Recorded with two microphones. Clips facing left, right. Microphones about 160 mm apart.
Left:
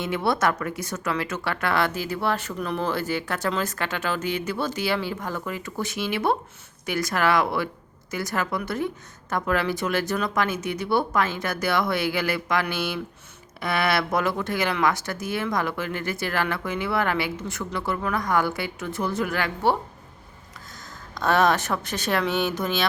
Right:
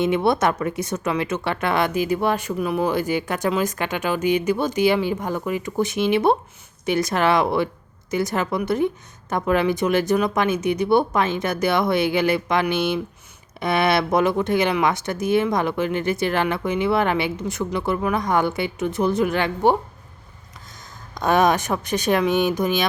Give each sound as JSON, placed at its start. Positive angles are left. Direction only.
{"t": 0.0, "sound": "speech", "side_deg": -20}
{"t": 21.2, "sound": "speech", "side_deg": -15}